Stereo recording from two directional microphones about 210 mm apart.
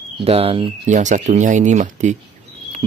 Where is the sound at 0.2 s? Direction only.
25° right (ahead or behind).